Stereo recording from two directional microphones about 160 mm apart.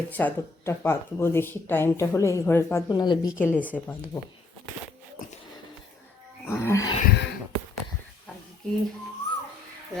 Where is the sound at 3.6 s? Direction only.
10° left (ahead or behind).